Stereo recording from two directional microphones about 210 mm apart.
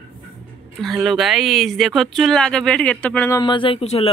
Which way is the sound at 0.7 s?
Centre (ahead or behind).